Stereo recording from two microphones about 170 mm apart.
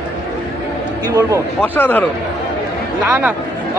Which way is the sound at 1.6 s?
10° left (ahead or behind).